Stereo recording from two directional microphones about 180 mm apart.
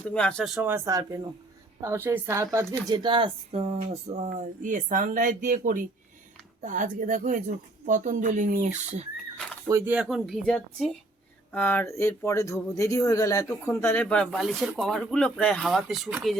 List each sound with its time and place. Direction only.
0.1 s speech: 5° left (ahead or behind)
0.7 s a woman's voice: 20° right (ahead or behind); by 9.0 s 40° right (ahead or behind)
9.6 s speech: 15° right (ahead or behind)
9.9 s speech: 5° right (ahead or behind)